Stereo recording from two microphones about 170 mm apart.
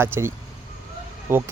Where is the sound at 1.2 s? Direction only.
15° right (ahead or behind).